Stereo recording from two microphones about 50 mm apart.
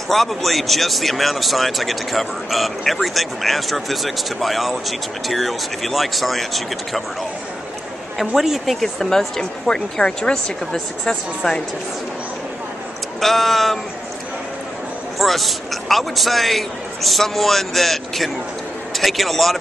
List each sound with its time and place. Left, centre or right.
0.1 s speech: centre
8.4 s speech: centre
13.2 s speech: centre
15.1 s speech: centre